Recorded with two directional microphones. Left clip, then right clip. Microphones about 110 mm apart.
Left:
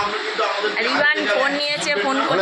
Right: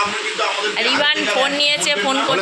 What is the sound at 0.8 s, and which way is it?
Speech, 25° right (ahead or behind).